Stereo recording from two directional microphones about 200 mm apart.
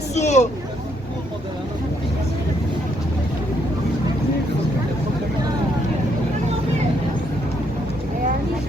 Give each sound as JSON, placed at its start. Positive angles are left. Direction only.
{"t": 0.1, "sound": "vehicle", "side_deg": 35}